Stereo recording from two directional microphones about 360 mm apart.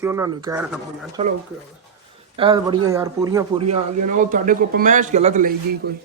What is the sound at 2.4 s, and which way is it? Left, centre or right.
Speech, centre.